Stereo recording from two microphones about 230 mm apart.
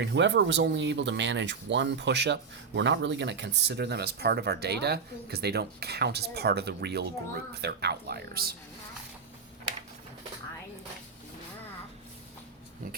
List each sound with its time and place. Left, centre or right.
0.0 s speech: right